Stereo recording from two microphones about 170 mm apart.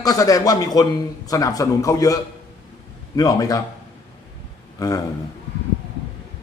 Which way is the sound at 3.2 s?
20° left (ahead or behind).